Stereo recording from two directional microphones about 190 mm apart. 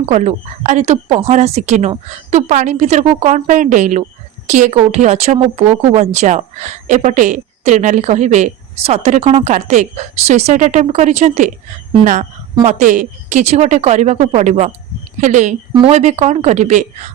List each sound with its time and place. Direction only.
0.0 s speech: 35° right (ahead or behind)